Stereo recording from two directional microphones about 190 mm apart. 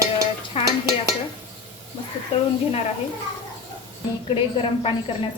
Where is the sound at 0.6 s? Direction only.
30° left (ahead or behind).